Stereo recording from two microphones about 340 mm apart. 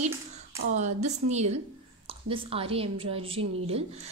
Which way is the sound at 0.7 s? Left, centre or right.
Centre.